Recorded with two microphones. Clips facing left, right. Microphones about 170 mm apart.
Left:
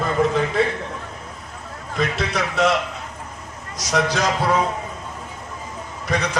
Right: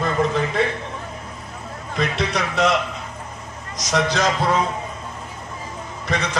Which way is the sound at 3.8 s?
10° left (ahead or behind).